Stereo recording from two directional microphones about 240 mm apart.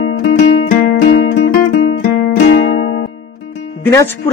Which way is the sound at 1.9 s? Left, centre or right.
Left.